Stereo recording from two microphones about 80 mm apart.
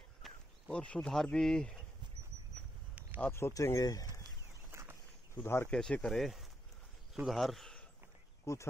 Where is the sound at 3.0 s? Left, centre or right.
Centre.